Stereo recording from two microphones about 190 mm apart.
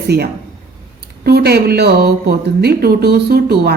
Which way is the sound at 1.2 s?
55° right (ahead or behind).